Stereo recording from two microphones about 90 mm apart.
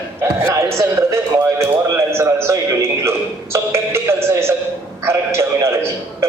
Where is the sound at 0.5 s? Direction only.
35° right (ahead or behind).